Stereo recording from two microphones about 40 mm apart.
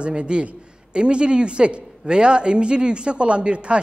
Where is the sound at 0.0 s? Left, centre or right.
Right.